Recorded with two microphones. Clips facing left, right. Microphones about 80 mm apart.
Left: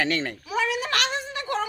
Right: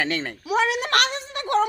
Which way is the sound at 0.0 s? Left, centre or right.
Right.